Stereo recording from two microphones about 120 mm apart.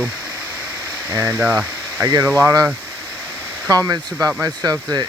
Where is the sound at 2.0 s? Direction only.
30° right (ahead or behind).